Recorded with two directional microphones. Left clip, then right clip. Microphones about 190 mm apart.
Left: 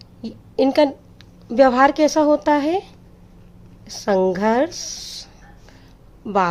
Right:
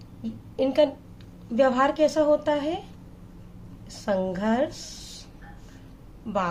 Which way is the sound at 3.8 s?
60° left (ahead or behind).